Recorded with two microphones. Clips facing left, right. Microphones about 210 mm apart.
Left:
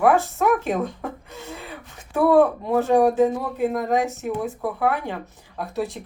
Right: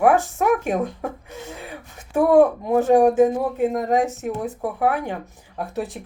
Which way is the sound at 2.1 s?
15° right (ahead or behind).